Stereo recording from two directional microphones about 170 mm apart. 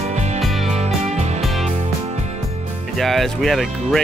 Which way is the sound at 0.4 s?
Centre (ahead or behind).